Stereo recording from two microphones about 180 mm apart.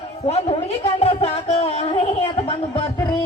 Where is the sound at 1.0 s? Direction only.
35° left (ahead or behind).